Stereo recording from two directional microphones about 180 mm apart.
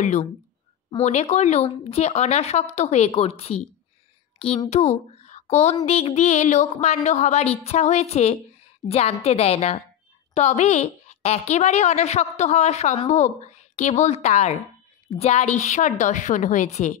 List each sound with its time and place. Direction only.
0.0 s a woman's voice: 40° left (ahead or behind)